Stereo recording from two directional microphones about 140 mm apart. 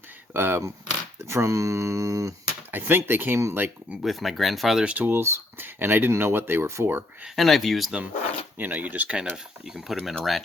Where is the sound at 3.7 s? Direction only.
5° right (ahead or behind).